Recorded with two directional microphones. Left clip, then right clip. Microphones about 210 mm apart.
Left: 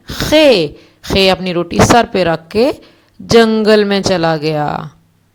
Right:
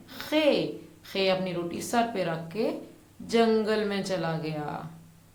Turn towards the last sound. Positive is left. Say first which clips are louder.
# left 18 dB
turn(degrees=40)  # may be behind; listen again after turning